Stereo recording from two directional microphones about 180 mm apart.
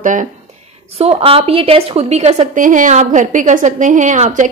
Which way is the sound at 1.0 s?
35° right (ahead or behind).